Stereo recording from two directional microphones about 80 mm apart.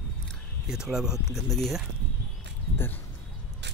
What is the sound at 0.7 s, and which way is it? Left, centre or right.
Speech, centre.